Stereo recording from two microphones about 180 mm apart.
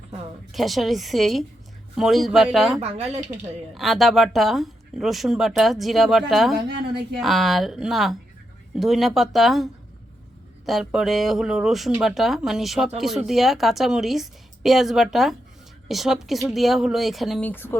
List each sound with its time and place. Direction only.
0.5 s speech: centre (ahead or behind)
2.8 s speech: 35° right (ahead or behind)
3.8 s speech: centre (ahead or behind)
6.7 s a woman's voice: 65° right (ahead or behind)
7.2 s speech: centre (ahead or behind)
10.7 s speech: centre (ahead or behind)
17.5 s speech: 10° left (ahead or behind)